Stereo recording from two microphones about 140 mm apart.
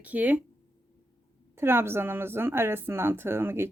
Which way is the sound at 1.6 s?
15° right (ahead or behind).